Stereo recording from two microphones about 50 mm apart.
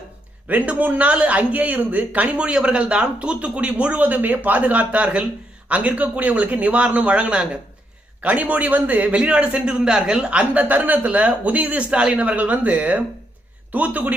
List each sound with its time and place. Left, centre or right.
0.4 s a man's voice: right
9.1 s a man's voice: right